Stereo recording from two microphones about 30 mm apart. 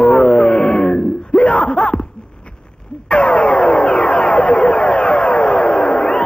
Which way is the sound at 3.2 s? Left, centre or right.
Left.